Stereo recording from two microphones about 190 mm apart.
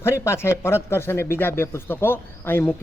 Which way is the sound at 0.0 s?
15° left (ahead or behind).